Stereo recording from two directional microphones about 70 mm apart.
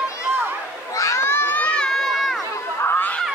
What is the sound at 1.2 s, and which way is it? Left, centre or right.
Run, left.